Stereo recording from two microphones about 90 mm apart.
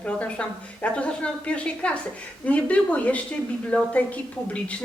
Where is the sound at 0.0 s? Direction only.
15° left (ahead or behind).